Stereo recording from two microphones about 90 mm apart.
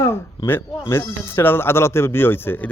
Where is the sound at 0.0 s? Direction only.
25° left (ahead or behind).